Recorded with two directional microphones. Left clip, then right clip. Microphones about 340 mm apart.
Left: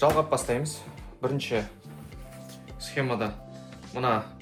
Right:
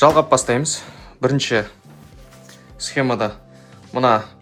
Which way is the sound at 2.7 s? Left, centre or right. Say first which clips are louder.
Right 9 dB; centre.